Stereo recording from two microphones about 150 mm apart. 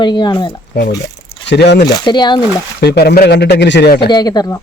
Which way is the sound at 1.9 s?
30° left (ahead or behind).